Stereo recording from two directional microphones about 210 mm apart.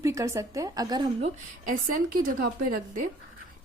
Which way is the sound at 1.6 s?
40° right (ahead or behind).